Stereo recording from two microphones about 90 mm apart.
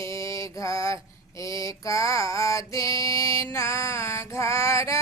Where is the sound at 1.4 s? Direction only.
35° left (ahead or behind).